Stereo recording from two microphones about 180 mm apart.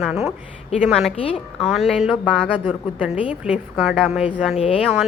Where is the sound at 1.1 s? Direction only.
35° left (ahead or behind).